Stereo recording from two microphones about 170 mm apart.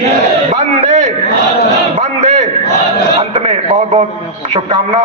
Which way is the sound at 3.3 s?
30° right (ahead or behind).